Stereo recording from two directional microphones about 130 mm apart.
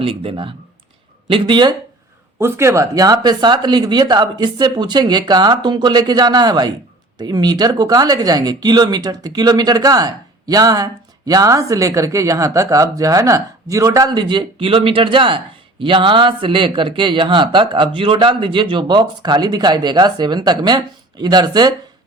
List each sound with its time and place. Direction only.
0.0 s speech: 45° right (ahead or behind)
2.4 s speech: 20° right (ahead or behind)